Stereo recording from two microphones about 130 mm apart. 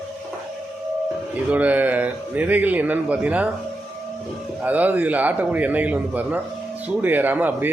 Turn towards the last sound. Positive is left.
turn(degrees=-15)  # may be behind; listen again after turning